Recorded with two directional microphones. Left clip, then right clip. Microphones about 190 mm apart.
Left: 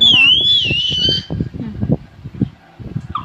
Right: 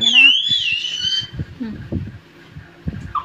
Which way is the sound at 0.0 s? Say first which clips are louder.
Left 2 dB; 25° left (ahead or behind).